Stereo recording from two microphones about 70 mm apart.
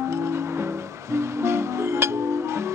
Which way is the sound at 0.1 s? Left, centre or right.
Right.